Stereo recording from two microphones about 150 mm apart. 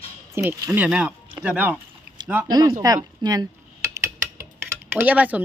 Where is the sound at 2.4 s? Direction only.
25° right (ahead or behind).